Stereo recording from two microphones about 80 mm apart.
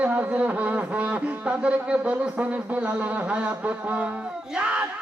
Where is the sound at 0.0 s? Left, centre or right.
Centre.